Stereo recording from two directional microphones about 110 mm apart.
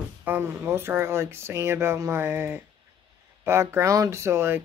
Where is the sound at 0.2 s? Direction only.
20° right (ahead or behind).